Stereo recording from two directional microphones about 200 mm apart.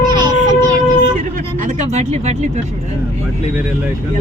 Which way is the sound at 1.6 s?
35° right (ahead or behind).